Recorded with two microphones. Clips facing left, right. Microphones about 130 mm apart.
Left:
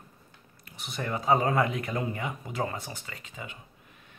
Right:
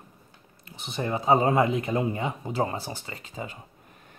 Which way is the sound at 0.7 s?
25° right (ahead or behind).